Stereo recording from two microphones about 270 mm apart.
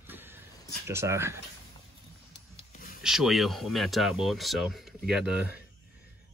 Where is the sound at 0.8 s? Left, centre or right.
Centre.